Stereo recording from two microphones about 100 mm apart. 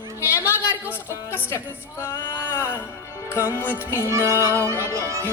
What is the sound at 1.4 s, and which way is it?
Speech, 25° left (ahead or behind).